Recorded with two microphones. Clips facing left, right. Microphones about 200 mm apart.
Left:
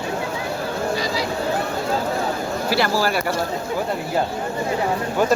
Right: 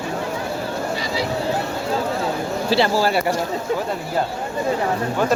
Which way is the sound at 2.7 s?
25° right (ahead or behind).